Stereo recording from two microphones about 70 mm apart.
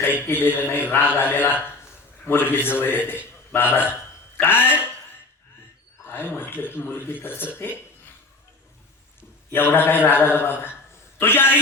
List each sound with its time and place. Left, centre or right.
0.0 s speech: left
3.8 s a sound: left
4.6 s speech: centre
6.1 s speech: left
9.5 s speech: left